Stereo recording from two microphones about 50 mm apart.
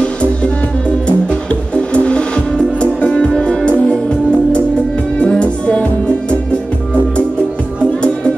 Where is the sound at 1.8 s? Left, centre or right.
Left.